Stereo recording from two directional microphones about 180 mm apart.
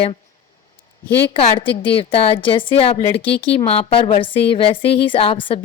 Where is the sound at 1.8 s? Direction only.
30° left (ahead or behind).